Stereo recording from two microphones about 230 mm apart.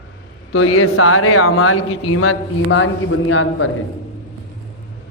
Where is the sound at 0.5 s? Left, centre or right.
Left.